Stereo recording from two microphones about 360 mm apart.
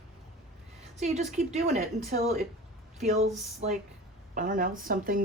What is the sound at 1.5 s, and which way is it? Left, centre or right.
Speech, centre.